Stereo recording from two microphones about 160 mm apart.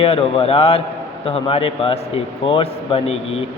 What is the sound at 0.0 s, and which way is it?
Speech, 35° left (ahead or behind).